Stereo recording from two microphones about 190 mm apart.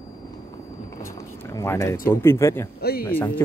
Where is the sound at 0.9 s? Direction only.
15° left (ahead or behind).